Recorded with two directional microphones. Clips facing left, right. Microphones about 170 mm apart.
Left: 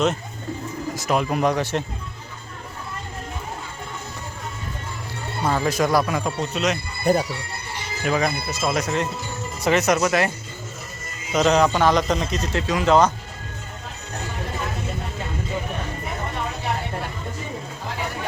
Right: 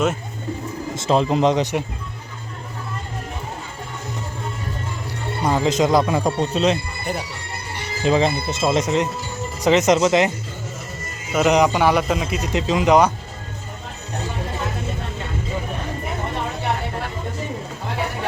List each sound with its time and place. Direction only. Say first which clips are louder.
0.9 s speech: right 4 dB; 25° right (ahead or behind)
5.4 s speech: right 3 dB; 15° right (ahead or behind)
6.2 s speech: right 5 dB; 30° right (ahead or behind)
7.0 s speech: left 7 dB; 40° left (ahead or behind)
8.0 s speech: right 5 dB; 25° right (ahead or behind)
11.3 s a man's voice: right 1 dB; 10° right (ahead or behind)
12.5 s a man's voice: right 2 dB; 20° right (ahead or behind)